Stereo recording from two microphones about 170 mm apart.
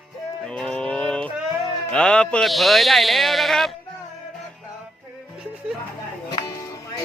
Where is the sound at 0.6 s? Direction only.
5° left (ahead or behind).